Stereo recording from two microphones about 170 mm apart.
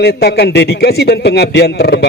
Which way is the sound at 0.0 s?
70° left (ahead or behind).